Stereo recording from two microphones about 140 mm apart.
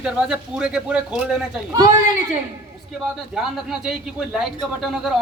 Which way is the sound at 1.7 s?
25° right (ahead or behind).